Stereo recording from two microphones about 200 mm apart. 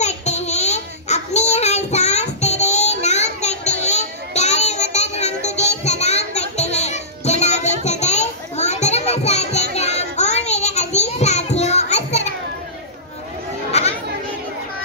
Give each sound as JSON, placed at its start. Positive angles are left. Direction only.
{"t": 0.0, "sound": "a sound", "side_deg": 35}
{"t": 9.8, "sound": "child singing", "side_deg": 35}
{"t": 13.7, "sound": "chatter", "side_deg": 35}